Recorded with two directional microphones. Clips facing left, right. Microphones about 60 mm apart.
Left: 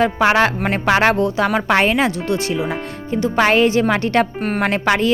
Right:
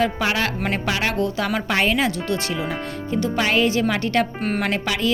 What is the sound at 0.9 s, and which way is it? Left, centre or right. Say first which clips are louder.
Speech: left 11 dB; left.